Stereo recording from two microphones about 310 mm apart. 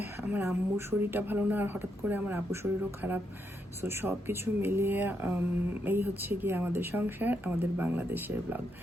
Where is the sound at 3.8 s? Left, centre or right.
Centre.